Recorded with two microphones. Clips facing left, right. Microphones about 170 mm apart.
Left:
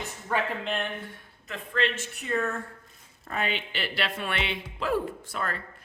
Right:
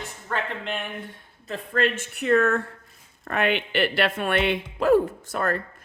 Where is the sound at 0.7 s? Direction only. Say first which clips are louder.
Even; centre (ahead or behind).